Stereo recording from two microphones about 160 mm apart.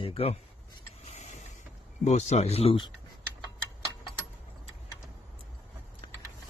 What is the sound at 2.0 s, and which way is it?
Speech, 45° left (ahead or behind).